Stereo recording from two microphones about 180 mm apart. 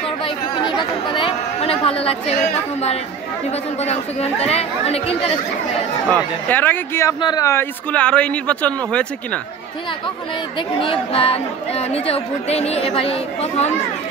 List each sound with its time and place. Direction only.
0.2 s chatter: 25° left (ahead or behind)
3.8 s speech: 35° left (ahead or behind)
6.0 s speech: 10° left (ahead or behind)
10.8 s speech: 30° left (ahead or behind)